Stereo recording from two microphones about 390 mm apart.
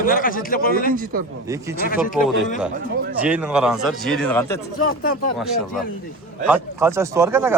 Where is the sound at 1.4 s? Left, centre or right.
Centre.